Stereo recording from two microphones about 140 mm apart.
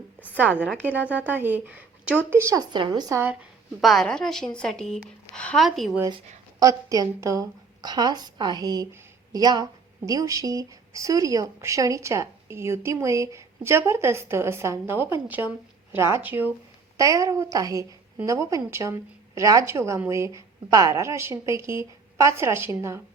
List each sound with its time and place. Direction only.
0.3 s a woman's voice: 10° right (ahead or behind)
2.7 s a woman's voice: 30° right (ahead or behind)
3.8 s a woman's voice: centre (ahead or behind)
6.6 s a woman's voice: 25° right (ahead or behind)